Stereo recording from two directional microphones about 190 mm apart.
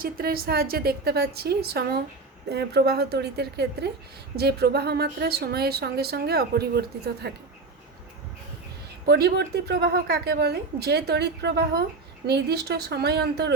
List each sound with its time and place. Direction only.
0.0 s speech: 50° right (ahead or behind)
9.0 s speech: 60° right (ahead or behind)